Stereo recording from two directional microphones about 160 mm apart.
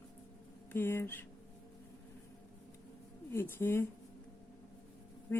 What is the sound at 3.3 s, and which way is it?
Speech, 15° left (ahead or behind).